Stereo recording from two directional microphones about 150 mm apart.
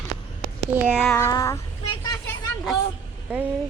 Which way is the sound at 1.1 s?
20° left (ahead or behind).